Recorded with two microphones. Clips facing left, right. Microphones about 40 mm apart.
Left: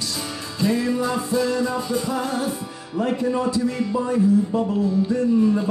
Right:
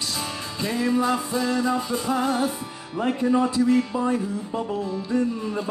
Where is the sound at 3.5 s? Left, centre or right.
Right.